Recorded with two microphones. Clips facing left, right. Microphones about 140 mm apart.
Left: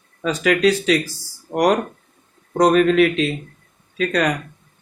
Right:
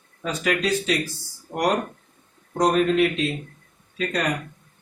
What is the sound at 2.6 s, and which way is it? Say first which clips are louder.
Speech: left 5 dB; 90° left.